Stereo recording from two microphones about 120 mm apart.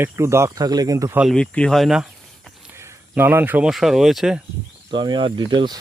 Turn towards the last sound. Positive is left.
turn(degrees=-40)  # may be behind; listen again after turning